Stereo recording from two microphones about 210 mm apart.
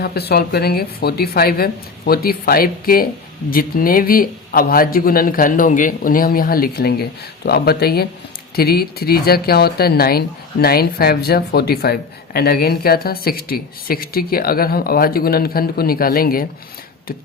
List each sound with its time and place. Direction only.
0.0 s speech: 50° left (ahead or behind)